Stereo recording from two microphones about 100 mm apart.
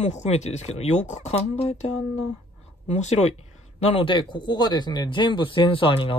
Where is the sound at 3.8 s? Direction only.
65° left (ahead or behind).